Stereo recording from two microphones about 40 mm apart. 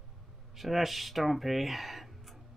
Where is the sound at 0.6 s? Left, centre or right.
Centre.